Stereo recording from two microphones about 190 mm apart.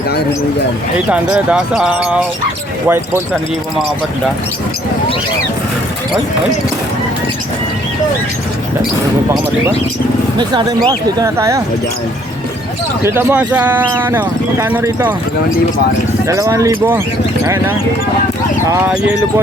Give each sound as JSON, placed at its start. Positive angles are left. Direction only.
{"t": 1.1, "sound": "speech", "side_deg": -5}
{"t": 10.3, "sound": "speech", "side_deg": -25}
{"t": 13.0, "sound": "speech", "side_deg": -10}
{"t": 16.2, "sound": "speech", "side_deg": -15}